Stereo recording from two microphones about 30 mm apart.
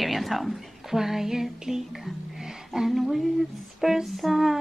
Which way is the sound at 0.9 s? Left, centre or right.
Centre.